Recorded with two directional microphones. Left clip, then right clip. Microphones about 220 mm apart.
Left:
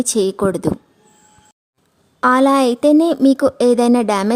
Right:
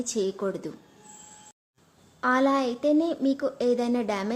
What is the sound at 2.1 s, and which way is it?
Speech, 50° left (ahead or behind).